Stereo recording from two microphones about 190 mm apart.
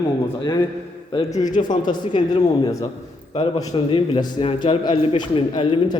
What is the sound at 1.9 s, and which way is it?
A man's voice, 20° left (ahead or behind).